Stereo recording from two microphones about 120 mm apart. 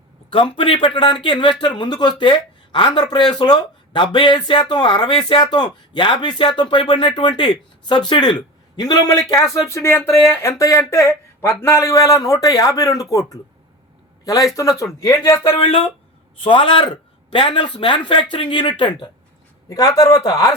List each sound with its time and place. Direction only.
0.3 s speech: 45° left (ahead or behind); by 15.4 s 25° left (ahead or behind)
15.4 s speech: 50° left (ahead or behind)
19.7 s speech: 30° left (ahead or behind)